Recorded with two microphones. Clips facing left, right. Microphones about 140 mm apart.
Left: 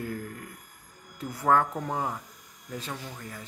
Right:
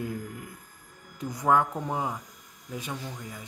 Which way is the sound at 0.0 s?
15° right (ahead or behind).